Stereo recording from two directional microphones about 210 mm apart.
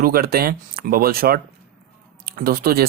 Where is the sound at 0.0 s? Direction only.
45° right (ahead or behind).